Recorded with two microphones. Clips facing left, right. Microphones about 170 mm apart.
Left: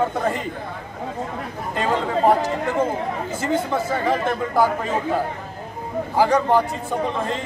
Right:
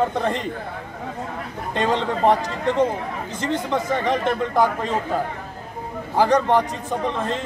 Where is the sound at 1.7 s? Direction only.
5° left (ahead or behind).